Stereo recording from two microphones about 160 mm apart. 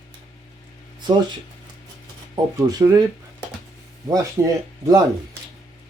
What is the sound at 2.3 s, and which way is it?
Speech, 25° right (ahead or behind).